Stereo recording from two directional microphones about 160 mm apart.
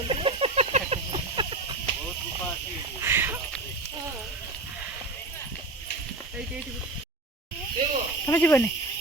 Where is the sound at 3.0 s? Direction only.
15° right (ahead or behind).